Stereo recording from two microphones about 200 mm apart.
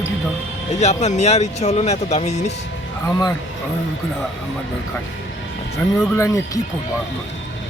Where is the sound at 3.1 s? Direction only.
20° left (ahead or behind).